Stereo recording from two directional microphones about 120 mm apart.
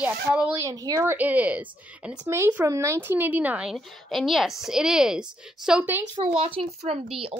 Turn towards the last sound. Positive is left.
turn(degrees=-50)  # may be behind; listen again after turning